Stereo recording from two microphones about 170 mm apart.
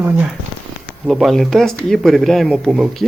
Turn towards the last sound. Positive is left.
turn(degrees=0)  # may be behind; listen again after turning